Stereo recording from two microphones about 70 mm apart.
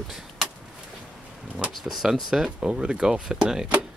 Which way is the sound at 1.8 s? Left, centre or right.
Centre.